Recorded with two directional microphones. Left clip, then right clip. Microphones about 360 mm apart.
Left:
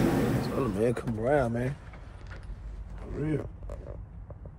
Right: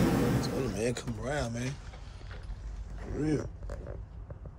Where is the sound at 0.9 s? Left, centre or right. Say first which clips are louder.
Left 8 dB; centre.